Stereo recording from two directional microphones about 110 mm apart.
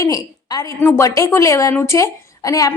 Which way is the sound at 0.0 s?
35° left (ahead or behind).